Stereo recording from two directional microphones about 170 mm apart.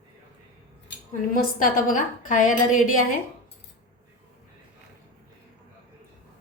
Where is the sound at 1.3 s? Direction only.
50° left (ahead or behind).